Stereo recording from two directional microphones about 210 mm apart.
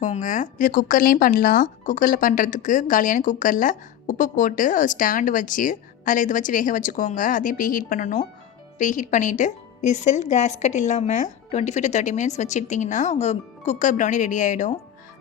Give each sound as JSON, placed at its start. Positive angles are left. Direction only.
{"t": 0.0, "sound": "speech", "side_deg": 35}